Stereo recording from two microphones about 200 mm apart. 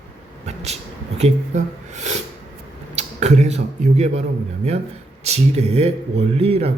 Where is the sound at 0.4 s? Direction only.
35° right (ahead or behind).